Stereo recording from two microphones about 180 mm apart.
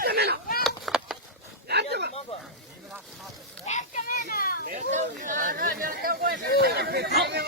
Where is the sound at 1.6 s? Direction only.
65° right (ahead or behind).